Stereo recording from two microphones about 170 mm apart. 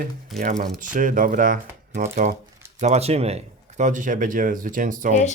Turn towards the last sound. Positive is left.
turn(degrees=-50)  # may be behind; listen again after turning